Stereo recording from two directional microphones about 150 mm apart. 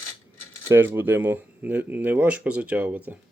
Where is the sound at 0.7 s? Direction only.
15° right (ahead or behind).